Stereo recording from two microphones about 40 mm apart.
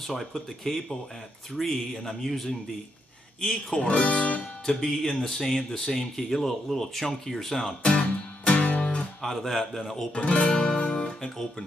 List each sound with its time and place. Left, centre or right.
0.1 s speech: centre
3.3 s speech: centre
3.8 s speech: left
4.6 s speech: centre
8.5 s music: left
9.2 s speech: centre
10.1 s speech: left
10.4 s music: centre
11.1 s speech: centre